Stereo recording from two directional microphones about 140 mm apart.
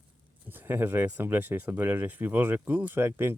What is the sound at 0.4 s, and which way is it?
Speech, 15° right (ahead or behind).